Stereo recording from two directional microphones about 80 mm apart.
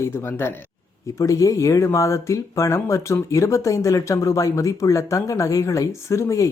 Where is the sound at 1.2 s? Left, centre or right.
Left.